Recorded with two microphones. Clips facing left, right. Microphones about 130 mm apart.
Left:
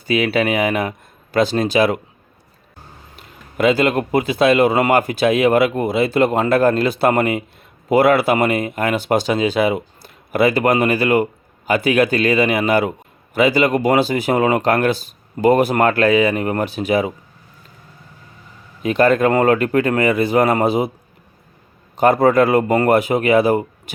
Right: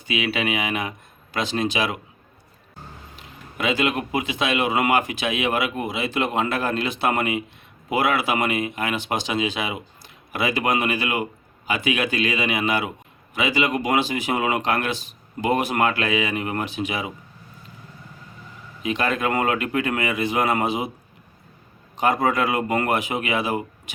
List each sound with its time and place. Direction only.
0.0 s speech: 40° left (ahead or behind)
3.6 s speech: 40° left (ahead or behind)
18.8 s speech: 45° left (ahead or behind)
22.0 s speech: 40° left (ahead or behind)